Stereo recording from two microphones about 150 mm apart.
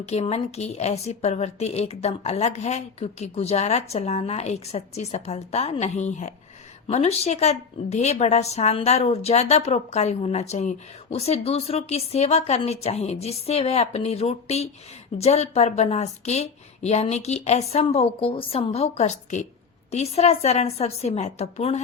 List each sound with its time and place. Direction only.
0.1 s a woman's voice: 45° left (ahead or behind)